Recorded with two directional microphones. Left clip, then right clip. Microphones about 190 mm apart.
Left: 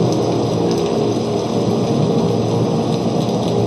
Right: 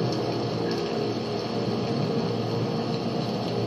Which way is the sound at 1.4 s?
40° left (ahead or behind).